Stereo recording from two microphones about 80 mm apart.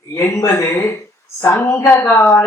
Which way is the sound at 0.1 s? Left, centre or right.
Left.